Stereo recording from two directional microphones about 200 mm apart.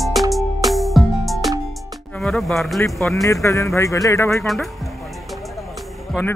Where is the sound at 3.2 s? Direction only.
15° left (ahead or behind).